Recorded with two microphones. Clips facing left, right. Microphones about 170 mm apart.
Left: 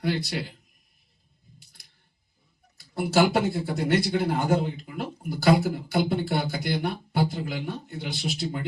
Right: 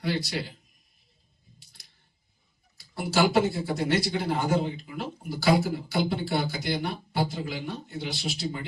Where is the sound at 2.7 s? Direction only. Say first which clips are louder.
Left 3 dB; 55° left (ahead or behind).